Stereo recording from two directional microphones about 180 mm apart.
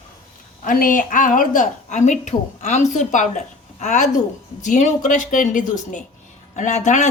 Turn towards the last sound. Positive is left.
turn(degrees=40)  # may be behind; listen again after turning